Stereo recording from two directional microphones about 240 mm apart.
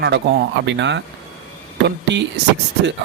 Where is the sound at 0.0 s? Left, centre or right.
Right.